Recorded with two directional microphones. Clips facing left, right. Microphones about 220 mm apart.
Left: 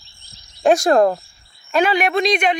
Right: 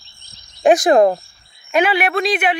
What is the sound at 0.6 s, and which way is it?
Speech, 15° right (ahead or behind).